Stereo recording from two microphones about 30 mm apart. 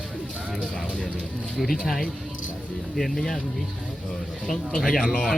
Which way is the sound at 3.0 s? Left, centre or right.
Centre.